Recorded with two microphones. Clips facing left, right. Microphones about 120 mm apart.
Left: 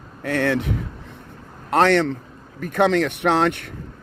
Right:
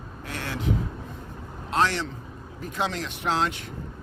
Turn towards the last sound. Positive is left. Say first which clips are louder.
# left 7 dB
turn(degrees=60)  # may be behind; listen again after turning